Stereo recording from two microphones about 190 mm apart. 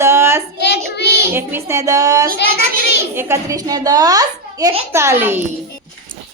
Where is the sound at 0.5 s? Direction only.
60° left (ahead or behind).